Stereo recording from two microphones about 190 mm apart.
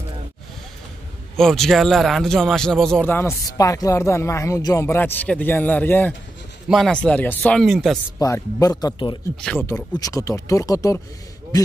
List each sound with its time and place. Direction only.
1.3 s a man's voice: centre (ahead or behind)
8.2 s speech: 20° left (ahead or behind)
9.4 s speech: 5° left (ahead or behind)
9.7 s a man's voice: 20° left (ahead or behind)